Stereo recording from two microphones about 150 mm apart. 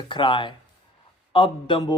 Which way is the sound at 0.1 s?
35° left (ahead or behind).